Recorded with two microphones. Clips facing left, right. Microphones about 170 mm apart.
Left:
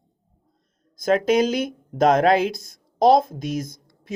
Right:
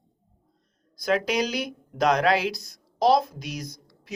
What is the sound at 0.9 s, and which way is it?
Speech, 45° left (ahead or behind).